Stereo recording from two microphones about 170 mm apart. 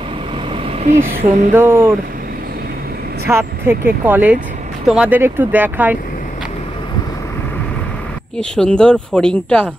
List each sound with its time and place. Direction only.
1.2 s a sound: 45° right (ahead or behind)
1.5 s speech: 15° right (ahead or behind)
3.3 s speech: 15° right (ahead or behind)
8.4 s speech: 5° left (ahead or behind)